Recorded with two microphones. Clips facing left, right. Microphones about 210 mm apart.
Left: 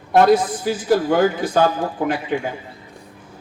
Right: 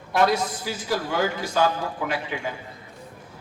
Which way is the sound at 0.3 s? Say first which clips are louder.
Left 9 dB; 50° left (ahead or behind).